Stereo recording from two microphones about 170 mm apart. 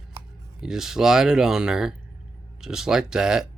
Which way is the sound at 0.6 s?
Centre (ahead or behind).